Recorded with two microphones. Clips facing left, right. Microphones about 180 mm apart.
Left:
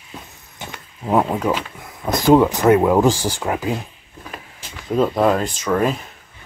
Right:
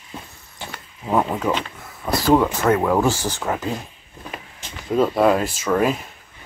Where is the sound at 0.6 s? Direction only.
15° left (ahead or behind).